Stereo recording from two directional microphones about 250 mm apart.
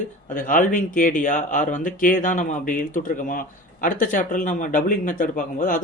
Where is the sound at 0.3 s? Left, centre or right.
Left.